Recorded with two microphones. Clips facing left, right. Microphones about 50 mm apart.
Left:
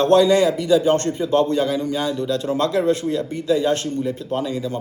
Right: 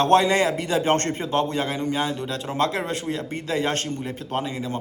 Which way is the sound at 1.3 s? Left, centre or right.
Right.